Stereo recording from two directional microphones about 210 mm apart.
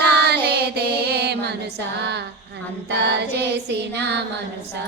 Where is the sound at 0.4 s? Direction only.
50° right (ahead or behind).